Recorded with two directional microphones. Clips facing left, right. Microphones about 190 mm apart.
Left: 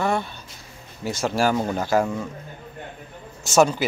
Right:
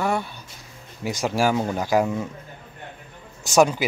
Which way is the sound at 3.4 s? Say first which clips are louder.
Even; 15° right (ahead or behind).